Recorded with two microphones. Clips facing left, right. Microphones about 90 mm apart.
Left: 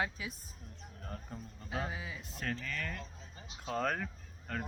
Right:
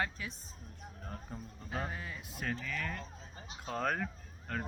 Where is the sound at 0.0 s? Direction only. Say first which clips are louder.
Even; 10° left (ahead or behind).